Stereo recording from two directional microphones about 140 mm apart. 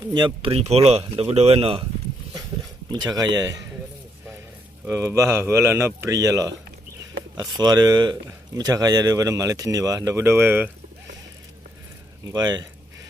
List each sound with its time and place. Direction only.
0.1 s speech: 35° right (ahead or behind)
2.9 s speech: 25° right (ahead or behind)
4.9 s speech: 20° right (ahead or behind)
12.3 s speech: 30° right (ahead or behind)